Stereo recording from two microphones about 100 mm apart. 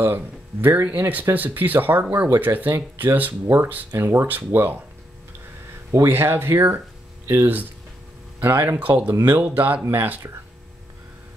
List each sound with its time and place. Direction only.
0.0 s speech: 20° right (ahead or behind)
5.9 s speech: 25° right (ahead or behind)